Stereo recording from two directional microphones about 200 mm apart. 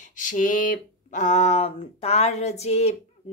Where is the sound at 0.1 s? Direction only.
40° left (ahead or behind).